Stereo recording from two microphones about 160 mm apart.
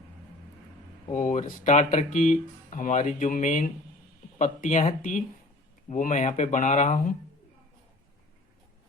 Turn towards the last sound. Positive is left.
turn(degrees=50)  # may be behind; listen again after turning